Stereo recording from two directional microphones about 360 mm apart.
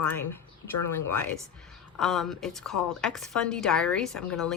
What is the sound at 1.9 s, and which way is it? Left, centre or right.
A woman's voice, centre.